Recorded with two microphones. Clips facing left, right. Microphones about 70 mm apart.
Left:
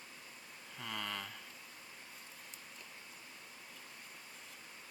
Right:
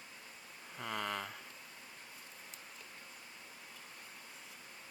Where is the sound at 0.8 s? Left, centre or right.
Right.